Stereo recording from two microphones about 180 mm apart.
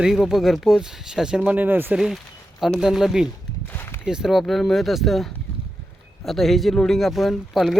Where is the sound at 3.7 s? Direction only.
10° left (ahead or behind).